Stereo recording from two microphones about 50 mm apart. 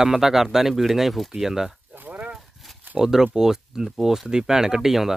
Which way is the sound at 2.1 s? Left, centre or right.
Right.